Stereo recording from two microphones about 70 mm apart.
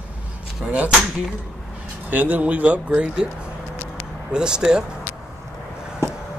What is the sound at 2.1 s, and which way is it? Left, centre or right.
Speech, right.